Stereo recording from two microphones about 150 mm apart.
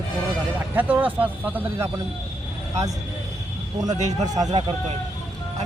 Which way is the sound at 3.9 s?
50° right (ahead or behind).